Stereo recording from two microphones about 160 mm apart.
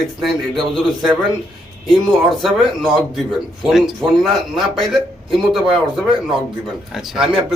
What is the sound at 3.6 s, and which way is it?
Speech, centre (ahead or behind).